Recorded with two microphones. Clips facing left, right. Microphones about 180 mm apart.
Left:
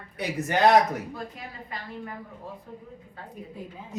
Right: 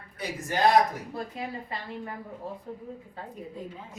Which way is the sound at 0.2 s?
70° left (ahead or behind).